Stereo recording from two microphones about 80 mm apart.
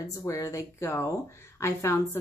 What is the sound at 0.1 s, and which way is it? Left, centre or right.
A woman's voice, left.